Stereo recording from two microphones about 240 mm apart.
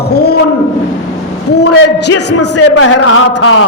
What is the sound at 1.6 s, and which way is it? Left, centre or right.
A man's voice, left.